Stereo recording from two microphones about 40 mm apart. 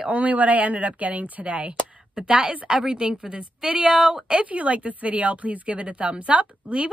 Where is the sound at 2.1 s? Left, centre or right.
Right.